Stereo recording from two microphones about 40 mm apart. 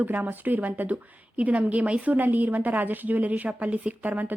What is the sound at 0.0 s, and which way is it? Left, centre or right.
A woman's voice, right.